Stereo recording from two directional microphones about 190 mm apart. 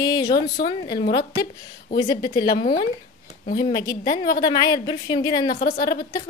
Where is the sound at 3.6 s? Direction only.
20° left (ahead or behind).